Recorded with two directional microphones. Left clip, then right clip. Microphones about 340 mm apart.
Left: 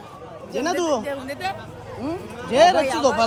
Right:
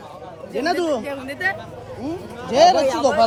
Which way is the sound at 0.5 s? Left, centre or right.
Centre.